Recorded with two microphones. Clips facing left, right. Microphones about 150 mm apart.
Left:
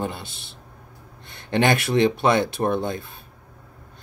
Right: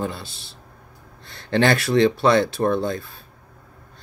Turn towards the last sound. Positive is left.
turn(degrees=20)  # may be behind; listen again after turning